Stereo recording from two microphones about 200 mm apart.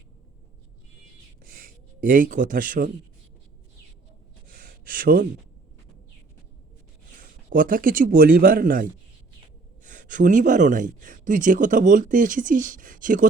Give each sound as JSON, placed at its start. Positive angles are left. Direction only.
{"t": 1.5, "sound": "gasp", "side_deg": -45}
{"t": 4.4, "sound": "a sound", "side_deg": -45}
{"t": 7.2, "sound": "speech", "side_deg": -45}